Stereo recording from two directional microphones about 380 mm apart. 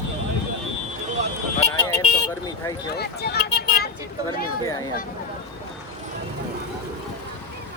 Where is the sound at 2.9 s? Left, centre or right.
Left.